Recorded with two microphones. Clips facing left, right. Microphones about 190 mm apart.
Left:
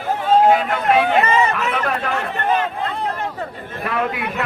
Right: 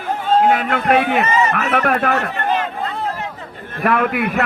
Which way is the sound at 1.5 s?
60° right (ahead or behind).